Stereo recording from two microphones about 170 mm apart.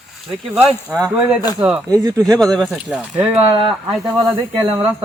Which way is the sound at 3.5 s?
30° right (ahead or behind).